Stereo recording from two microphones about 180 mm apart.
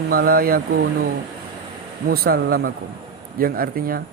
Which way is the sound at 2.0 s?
60° right (ahead or behind).